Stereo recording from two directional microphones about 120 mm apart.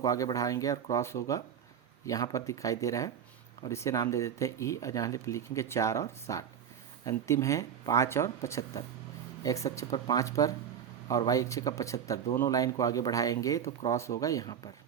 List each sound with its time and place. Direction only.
0.0 s speech: 30° left (ahead or behind)